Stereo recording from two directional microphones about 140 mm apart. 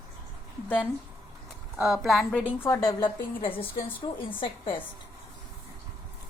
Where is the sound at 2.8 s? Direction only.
30° left (ahead or behind).